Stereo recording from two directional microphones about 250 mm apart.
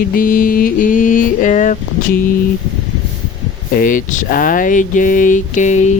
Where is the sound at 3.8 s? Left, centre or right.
Left.